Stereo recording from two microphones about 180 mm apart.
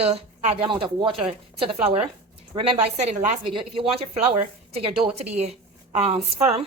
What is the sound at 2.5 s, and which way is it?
A woman's voice, 35° right (ahead or behind).